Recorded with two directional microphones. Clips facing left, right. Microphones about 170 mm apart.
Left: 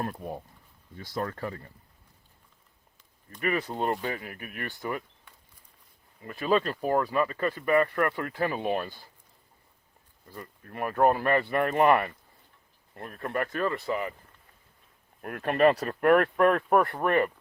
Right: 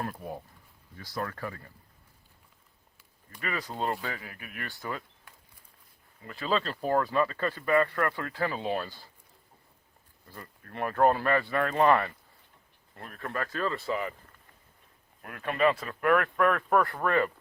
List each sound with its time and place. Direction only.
0.2 s speech: 20° left (ahead or behind)
3.4 s speech: 25° left (ahead or behind)
6.2 s speech: 20° left (ahead or behind)
10.2 s speech: 15° left (ahead or behind)
15.2 s speech: 50° left (ahead or behind)
16.4 s speech: 25° left (ahead or behind)